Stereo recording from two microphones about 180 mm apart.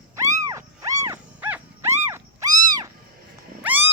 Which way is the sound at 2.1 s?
20° right (ahead or behind).